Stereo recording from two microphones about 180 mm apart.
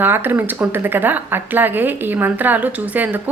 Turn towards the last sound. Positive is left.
turn(degrees=-10)  # may be behind; listen again after turning